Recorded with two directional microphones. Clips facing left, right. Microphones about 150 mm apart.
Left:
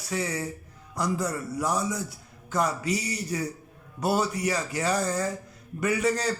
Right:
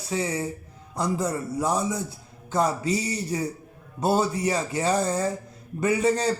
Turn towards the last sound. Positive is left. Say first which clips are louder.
# right 3 dB
turn(degrees=-30)  # may be behind; listen again after turning